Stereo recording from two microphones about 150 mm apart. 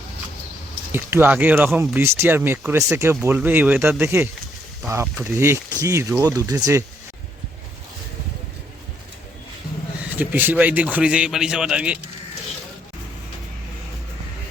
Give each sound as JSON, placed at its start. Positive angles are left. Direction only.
{"t": 0.9, "sound": "speech", "side_deg": -15}
{"t": 10.0, "sound": "speech", "side_deg": -10}